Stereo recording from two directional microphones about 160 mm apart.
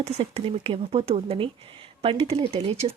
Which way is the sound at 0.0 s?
40° right (ahead or behind).